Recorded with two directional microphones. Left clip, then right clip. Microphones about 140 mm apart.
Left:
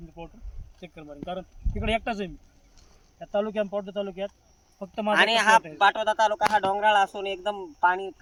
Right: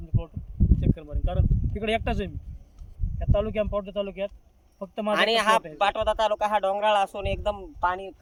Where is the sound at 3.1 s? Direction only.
25° right (ahead or behind).